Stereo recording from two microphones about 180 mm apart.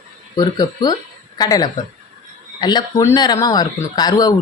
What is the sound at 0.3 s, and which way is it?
Speech, 20° left (ahead or behind).